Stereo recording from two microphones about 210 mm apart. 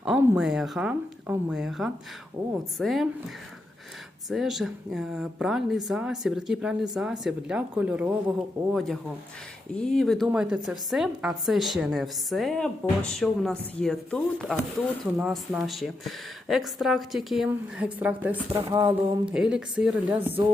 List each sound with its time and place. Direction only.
0.0 s speech: 5° right (ahead or behind)
4.3 s speech: centre (ahead or behind)
18.5 s a sound: 20° right (ahead or behind)
19.2 s speech: 5° right (ahead or behind)